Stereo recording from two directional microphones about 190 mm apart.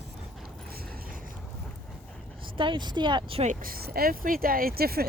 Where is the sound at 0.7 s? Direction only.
50° right (ahead or behind).